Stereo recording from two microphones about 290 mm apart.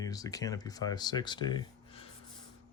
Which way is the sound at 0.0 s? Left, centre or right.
Centre.